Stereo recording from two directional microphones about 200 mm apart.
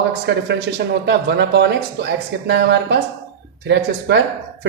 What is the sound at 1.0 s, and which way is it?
Speech, 60° right (ahead or behind).